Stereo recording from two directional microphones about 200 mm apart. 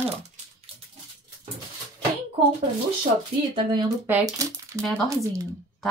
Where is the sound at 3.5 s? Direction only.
20° right (ahead or behind).